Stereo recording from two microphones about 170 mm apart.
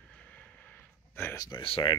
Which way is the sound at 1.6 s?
30° left (ahead or behind).